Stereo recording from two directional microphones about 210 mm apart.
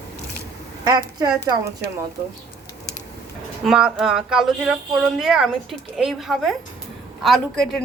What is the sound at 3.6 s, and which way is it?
Speech, 5° right (ahead or behind).